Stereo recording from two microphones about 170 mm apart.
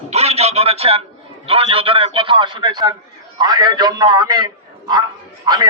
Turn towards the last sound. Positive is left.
turn(degrees=-25)  # may be behind; listen again after turning